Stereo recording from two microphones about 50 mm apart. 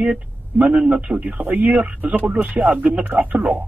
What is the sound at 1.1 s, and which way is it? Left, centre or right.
Speech, right.